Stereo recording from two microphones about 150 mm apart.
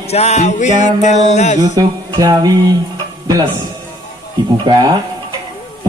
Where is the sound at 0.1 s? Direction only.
45° left (ahead or behind).